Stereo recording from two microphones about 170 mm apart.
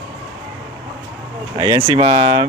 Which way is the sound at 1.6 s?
25° right (ahead or behind).